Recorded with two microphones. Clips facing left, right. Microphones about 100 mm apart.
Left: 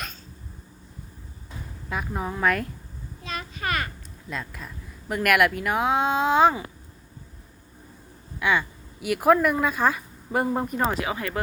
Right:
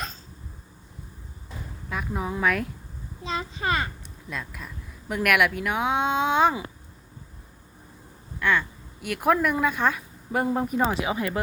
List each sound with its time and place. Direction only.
1.9 s a woman's voice: centre (ahead or behind)
3.2 s a sound: 25° right (ahead or behind)
4.3 s a woman's voice: centre (ahead or behind)
8.4 s a woman's voice: 10° left (ahead or behind)
11.0 s speech: 20° right (ahead or behind)